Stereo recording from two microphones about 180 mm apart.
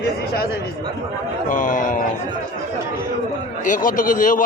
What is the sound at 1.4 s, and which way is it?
Speech, 45° left (ahead or behind).